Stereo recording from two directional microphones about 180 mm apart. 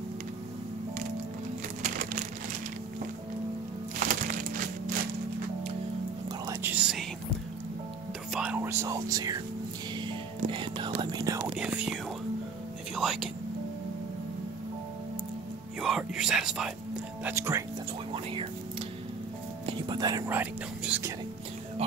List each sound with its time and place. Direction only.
4.1 s a sound: 50° right (ahead or behind)
6.5 s whispering: 10° right (ahead or behind)
8.3 s whispering: 5° right (ahead or behind)
10.0 s music: 25° right (ahead or behind)
11.0 s whispering: 25° right (ahead or behind)
11.5 s whispering: 5° right (ahead or behind)
12.9 s a sound: centre (ahead or behind)
15.8 s speech: 5° right (ahead or behind)
18.1 s a sound: 30° right (ahead or behind)
19.6 s speech: 25° right (ahead or behind)